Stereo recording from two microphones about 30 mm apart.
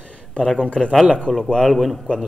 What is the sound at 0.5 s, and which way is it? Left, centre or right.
Speech, left.